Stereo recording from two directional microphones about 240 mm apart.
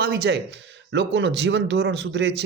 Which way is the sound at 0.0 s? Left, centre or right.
Right.